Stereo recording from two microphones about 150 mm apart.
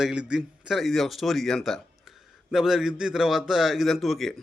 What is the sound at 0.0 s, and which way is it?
Speech, 5° right (ahead or behind).